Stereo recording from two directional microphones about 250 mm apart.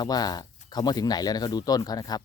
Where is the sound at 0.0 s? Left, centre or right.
Centre.